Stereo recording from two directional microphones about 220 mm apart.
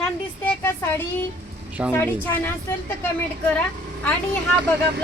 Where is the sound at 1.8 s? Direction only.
5° right (ahead or behind).